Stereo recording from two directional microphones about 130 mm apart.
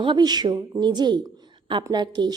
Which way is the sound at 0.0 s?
35° right (ahead or behind).